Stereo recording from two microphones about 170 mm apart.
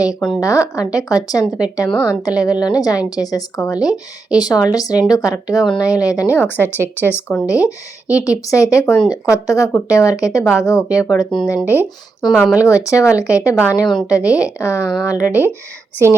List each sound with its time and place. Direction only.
0.3 s a woman's voice: 20° left (ahead or behind)